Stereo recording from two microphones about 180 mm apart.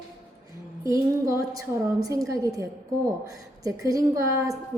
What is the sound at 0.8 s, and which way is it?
A woman's voice, 20° right (ahead or behind).